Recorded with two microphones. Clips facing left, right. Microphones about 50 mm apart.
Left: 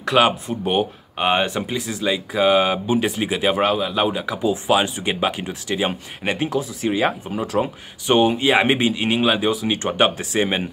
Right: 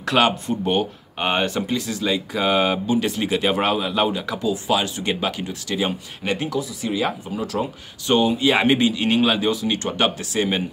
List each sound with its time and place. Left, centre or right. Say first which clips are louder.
0.0 s speech: left 2 dB; centre
2.9 s speech: left 1 dB; centre
3.3 s speech: left 1 dB; centre
4.1 s speech: left 2 dB; centre; by 8.5 s left
8.5 s speech: even; centre
9.0 s speech: even; centre; by 10.6 s left